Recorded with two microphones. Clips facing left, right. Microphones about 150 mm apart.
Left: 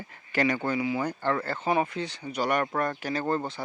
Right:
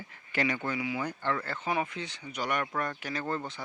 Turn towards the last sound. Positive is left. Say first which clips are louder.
# left 6 dB
turn(degrees=35)  # may be behind; listen again after turning